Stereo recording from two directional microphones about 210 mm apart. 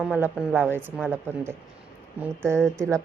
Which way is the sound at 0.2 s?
10° right (ahead or behind).